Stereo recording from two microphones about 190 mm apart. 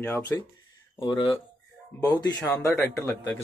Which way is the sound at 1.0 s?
25° left (ahead or behind).